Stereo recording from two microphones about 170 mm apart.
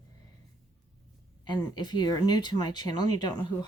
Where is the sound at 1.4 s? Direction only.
25° left (ahead or behind).